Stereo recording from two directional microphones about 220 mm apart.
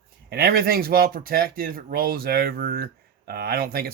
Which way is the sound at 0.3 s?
45° right (ahead or behind).